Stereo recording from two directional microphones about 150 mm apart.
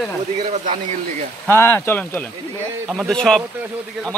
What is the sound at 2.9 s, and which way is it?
Speech, centre (ahead or behind).